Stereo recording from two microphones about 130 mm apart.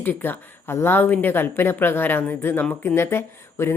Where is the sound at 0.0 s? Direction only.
15° left (ahead or behind).